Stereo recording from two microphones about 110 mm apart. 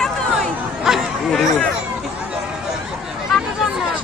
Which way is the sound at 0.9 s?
Centre (ahead or behind).